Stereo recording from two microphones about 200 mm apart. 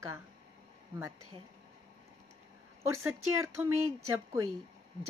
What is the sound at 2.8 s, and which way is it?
Speech, 15° right (ahead or behind).